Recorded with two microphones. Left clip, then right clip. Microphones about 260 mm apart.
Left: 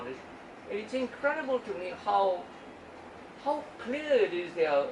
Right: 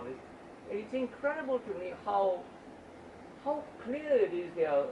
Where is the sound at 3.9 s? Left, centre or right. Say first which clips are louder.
Left 2 dB; centre.